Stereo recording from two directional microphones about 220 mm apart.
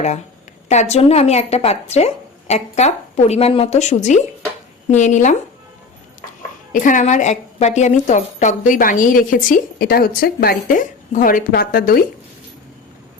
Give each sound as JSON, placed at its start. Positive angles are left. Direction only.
{"t": 0.7, "sound": "a woman's voice", "side_deg": 30}
{"t": 6.7, "sound": "a woman's voice", "side_deg": 35}